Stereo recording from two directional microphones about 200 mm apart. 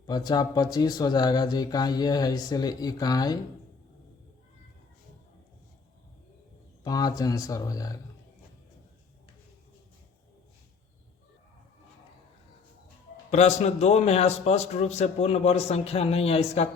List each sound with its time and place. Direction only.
0.0 s speech: 20° left (ahead or behind)
6.8 s speech: 20° left (ahead or behind)
13.3 s a man's voice: 35° left (ahead or behind)